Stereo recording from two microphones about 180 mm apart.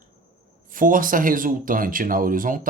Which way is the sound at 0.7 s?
50° right (ahead or behind).